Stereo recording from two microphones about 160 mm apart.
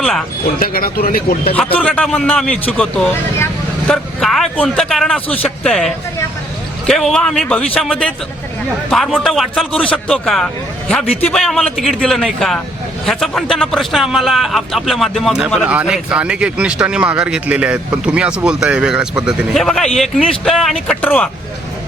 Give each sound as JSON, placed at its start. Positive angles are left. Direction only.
{"t": 0.0, "sound": "speech", "side_deg": 0}
{"t": 0.6, "sound": "speech", "side_deg": 65}
{"t": 1.5, "sound": "a man's voice", "side_deg": 10}
{"t": 3.3, "sound": "vehicle", "side_deg": 15}
{"t": 3.9, "sound": "speech", "side_deg": 0}